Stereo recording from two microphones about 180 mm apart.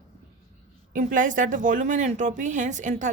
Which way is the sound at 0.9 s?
45° right (ahead or behind).